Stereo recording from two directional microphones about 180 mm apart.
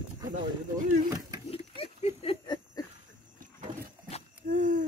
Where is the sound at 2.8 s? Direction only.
20° left (ahead or behind).